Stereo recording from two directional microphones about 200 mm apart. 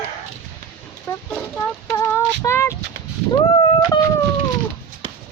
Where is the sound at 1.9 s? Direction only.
15° left (ahead or behind).